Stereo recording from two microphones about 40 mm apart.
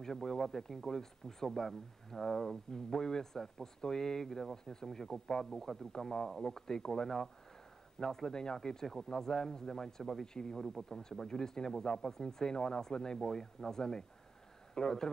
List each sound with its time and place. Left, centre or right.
0.0 s speech: centre
10.6 s a man's voice: centre